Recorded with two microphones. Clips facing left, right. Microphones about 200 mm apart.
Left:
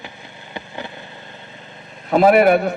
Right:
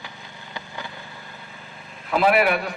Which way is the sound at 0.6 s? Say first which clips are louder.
Left 5 dB; 20° left (ahead or behind).